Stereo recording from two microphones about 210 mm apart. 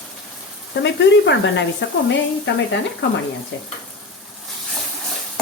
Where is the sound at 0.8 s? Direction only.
60° left (ahead or behind).